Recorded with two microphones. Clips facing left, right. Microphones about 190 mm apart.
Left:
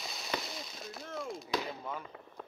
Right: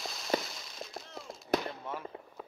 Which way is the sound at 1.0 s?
55° left (ahead or behind).